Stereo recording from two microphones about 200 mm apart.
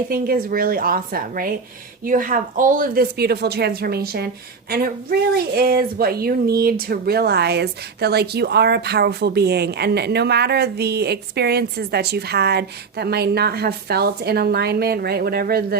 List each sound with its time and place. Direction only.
0.1 s speech: 45° right (ahead or behind)
5.5 s speech: 50° right (ahead or behind)